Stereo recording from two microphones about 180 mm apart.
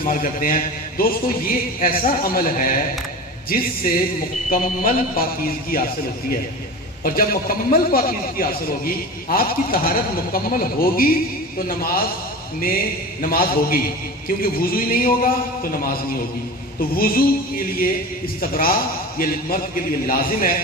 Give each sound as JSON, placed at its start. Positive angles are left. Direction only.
{"t": 0.0, "sound": "a man's voice", "side_deg": 50}
{"t": 7.0, "sound": "a man's voice", "side_deg": 50}
{"t": 13.2, "sound": "a man's voice", "side_deg": 55}